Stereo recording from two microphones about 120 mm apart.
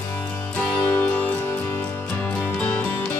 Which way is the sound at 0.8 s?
20° left (ahead or behind).